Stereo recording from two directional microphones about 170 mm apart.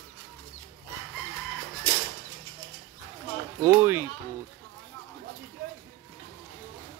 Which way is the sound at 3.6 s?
15° right (ahead or behind).